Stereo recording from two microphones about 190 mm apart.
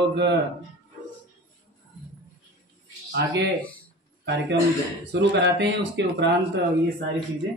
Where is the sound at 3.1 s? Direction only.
65° right (ahead or behind).